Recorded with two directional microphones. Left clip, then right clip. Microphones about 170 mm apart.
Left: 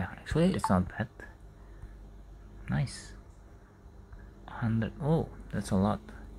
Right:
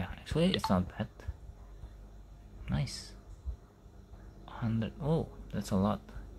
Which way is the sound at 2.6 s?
Centre (ahead or behind).